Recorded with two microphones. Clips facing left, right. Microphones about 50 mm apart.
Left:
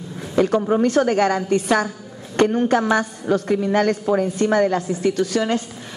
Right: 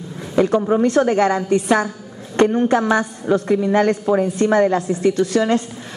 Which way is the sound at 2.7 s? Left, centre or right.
Right.